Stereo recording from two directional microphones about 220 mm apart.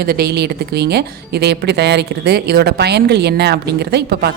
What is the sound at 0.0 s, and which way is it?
A woman's voice, 45° right (ahead or behind).